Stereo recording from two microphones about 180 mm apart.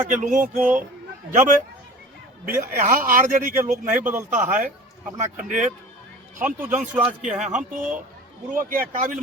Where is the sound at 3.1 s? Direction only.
45° right (ahead or behind).